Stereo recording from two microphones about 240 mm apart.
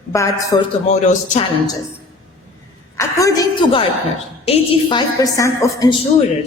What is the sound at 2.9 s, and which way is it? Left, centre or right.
A woman's voice, centre.